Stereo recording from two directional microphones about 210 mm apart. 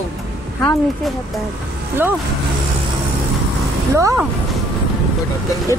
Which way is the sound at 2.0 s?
10° right (ahead or behind).